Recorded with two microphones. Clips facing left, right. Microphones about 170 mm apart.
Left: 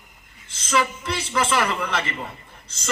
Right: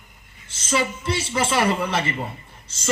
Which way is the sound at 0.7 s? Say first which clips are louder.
Even; 30° right (ahead or behind).